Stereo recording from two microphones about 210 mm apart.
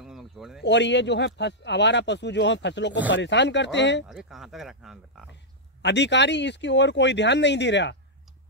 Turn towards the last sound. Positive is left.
turn(degrees=55)  # may be behind; listen again after turning